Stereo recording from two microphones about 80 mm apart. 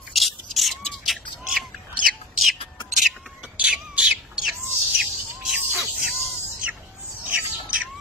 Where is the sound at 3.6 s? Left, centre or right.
Centre.